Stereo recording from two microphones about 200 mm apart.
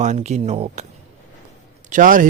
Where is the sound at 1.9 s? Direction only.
40° right (ahead or behind).